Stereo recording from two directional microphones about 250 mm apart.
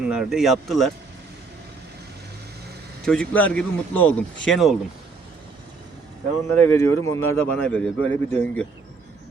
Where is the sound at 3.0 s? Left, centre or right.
Centre.